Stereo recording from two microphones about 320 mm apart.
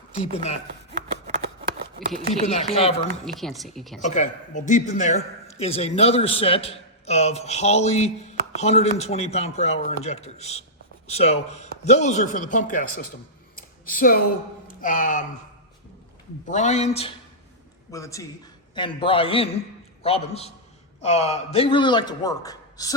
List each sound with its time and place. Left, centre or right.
0.2 s a man's voice: centre
1.8 s a sound: right
2.4 s a man's voice: centre
3.2 s a woman's voice: centre
4.0 s a man's voice: left
13.6 s a sound: left
14.7 s speech: left
16.5 s a man's voice: left